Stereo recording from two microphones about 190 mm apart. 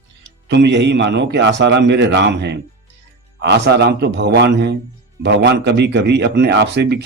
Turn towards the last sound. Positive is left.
turn(degrees=-65)  # may be behind; listen again after turning